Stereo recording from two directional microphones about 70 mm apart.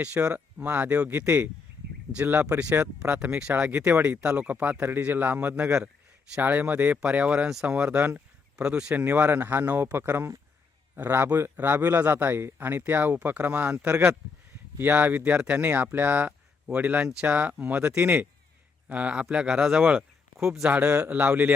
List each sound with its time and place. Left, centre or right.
0.0 s speech: centre
3.8 s a man's voice: right
4.0 s speech: centre
7.9 s speech: right
8.5 s speech: centre
9.0 s a man's voice: right; by 20.5 s centre
20.7 s speech: right